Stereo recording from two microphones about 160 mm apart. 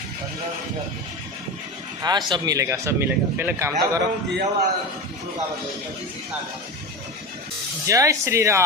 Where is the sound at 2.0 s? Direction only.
25° right (ahead or behind).